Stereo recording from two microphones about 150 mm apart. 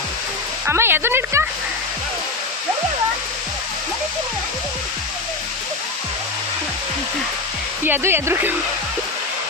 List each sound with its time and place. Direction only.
0.7 s speech: 15° right (ahead or behind)
7.9 s speech: 15° right (ahead or behind)